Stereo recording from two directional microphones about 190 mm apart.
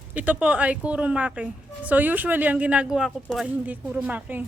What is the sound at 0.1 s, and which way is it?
A woman's voice, 5° right (ahead or behind).